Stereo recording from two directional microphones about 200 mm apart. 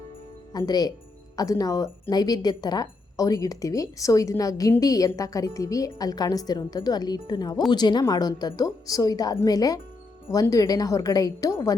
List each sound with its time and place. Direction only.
0.5 s speech: 20° left (ahead or behind)